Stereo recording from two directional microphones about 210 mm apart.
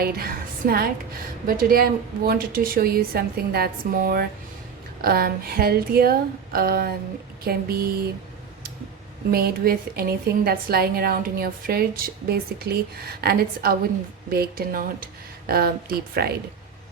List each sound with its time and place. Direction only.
0.0 s a woman's voice: 45° right (ahead or behind)
9.3 s a woman's voice: 45° right (ahead or behind)